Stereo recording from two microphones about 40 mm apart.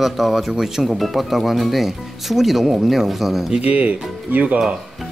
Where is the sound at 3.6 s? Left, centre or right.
Right.